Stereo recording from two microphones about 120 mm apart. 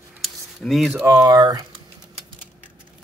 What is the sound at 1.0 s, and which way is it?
Speech, 30° right (ahead or behind).